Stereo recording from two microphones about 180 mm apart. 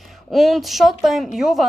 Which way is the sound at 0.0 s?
Centre (ahead or behind).